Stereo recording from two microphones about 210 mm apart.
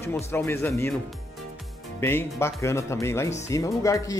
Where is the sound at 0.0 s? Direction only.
10° left (ahead or behind).